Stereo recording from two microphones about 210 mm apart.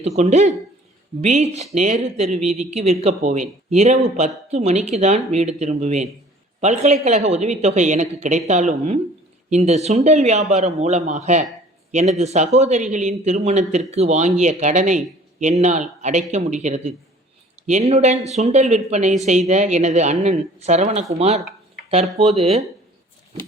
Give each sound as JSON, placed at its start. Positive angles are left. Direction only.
{"t": 0.0, "sound": "a man's voice", "side_deg": -30}